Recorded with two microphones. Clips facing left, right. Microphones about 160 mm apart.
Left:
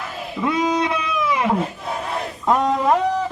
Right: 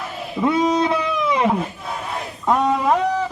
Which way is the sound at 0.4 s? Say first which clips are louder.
Right 3 dB; 25° right (ahead or behind).